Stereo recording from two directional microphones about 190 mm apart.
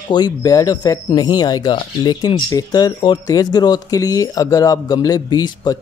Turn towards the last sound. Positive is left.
turn(degrees=20)  # may be behind; listen again after turning